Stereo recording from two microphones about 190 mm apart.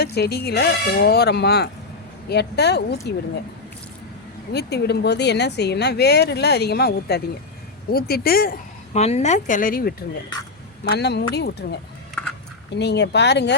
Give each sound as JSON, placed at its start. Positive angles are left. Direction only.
{"t": 0.0, "sound": "a woman's voice", "side_deg": 55}
{"t": 4.5, "sound": "a woman's voice", "side_deg": 60}
{"t": 8.9, "sound": "speech", "side_deg": 35}
{"t": 10.8, "sound": "a woman's voice", "side_deg": 60}